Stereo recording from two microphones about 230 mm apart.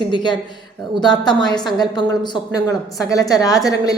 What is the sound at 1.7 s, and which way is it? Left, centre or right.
A woman's voice, centre.